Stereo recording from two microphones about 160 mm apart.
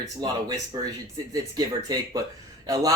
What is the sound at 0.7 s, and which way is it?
Speech, 20° right (ahead or behind).